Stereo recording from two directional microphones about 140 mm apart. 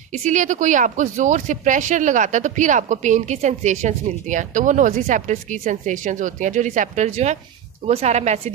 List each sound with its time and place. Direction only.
0.1 s a woman's voice: 60° right (ahead or behind)